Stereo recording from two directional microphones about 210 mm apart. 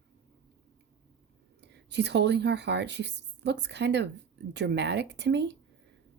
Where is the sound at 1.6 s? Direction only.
55° right (ahead or behind).